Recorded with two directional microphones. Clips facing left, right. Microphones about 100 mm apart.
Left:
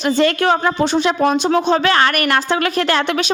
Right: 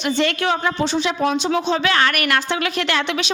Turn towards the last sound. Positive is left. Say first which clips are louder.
# left 4 dB
turn(degrees=40)  # may be behind; listen again after turning